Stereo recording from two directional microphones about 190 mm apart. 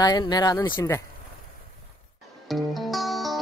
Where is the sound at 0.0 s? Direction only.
20° left (ahead or behind).